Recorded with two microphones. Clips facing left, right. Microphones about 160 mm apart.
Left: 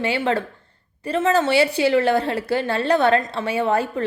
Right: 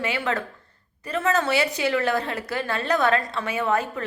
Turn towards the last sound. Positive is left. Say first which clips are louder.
# left 4 dB
turn(degrees=30)  # may be behind; listen again after turning